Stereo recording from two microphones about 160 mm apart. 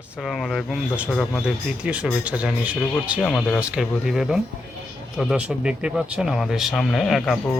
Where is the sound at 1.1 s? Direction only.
5° left (ahead or behind).